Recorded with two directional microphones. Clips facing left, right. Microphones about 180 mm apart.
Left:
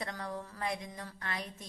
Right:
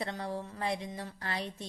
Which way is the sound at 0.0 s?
30° right (ahead or behind).